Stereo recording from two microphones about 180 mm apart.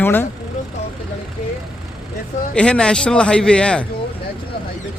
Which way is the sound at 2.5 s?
5° left (ahead or behind).